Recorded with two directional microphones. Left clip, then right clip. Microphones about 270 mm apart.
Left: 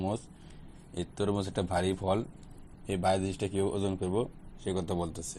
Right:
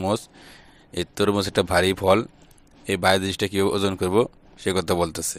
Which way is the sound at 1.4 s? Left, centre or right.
Right.